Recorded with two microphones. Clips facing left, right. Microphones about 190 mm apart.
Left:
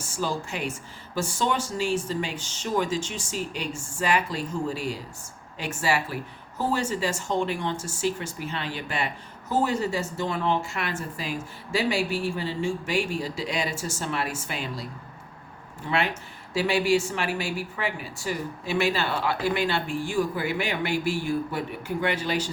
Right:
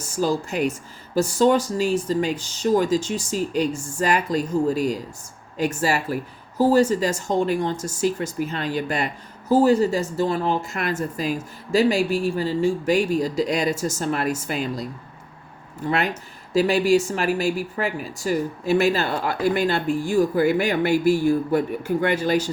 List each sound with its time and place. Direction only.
0.0 s speech: 40° right (ahead or behind)
15.9 s speech: 40° right (ahead or behind)